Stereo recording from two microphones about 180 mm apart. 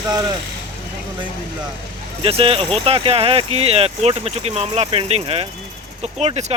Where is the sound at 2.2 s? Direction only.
30° right (ahead or behind).